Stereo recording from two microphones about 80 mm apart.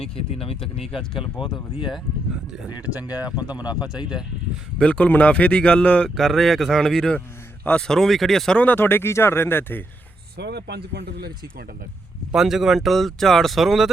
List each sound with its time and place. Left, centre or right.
0.6 s speech: centre
1.1 s speech: left
2.6 s speech: left
3.5 s a man's voice: centre
4.8 s speech: centre
6.1 s speech: centre
8.5 s speech: left
12.3 s speech: centre